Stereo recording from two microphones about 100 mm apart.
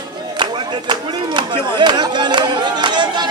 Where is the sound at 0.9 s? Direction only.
50° right (ahead or behind).